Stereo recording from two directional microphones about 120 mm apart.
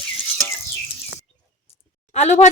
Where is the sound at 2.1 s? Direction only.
75° left (ahead or behind).